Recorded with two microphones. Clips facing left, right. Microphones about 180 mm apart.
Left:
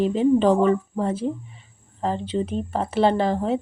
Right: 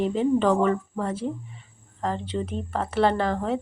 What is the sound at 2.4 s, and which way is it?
Speech, 20° left (ahead or behind).